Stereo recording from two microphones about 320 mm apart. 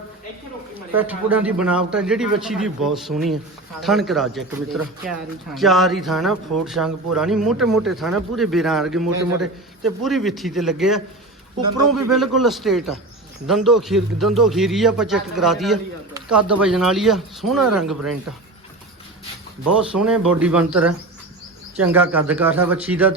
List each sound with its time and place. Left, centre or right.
0.9 s a man's voice: centre
11.8 s speech: right
12.1 s a man's voice: centre
19.7 s a man's voice: centre